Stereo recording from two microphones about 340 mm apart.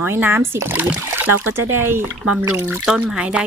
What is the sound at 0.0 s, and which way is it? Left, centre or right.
Speech, centre.